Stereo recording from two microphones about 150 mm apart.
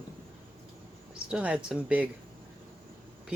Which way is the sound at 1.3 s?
5° right (ahead or behind).